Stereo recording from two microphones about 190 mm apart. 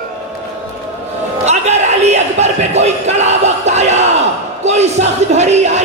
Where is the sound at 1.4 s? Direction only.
35° right (ahead or behind).